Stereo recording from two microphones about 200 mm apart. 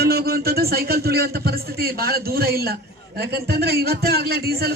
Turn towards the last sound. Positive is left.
turn(degrees=-50)  # may be behind; listen again after turning